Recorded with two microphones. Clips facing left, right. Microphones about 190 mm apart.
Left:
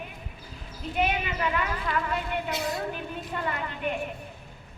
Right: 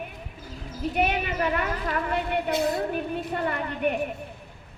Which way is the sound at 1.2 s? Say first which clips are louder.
Right 3 dB; 45° right (ahead or behind).